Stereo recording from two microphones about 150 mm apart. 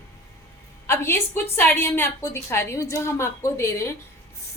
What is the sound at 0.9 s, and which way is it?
A woman's voice, 15° left (ahead or behind).